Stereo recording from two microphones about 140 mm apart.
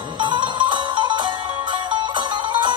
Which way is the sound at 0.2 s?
35° right (ahead or behind).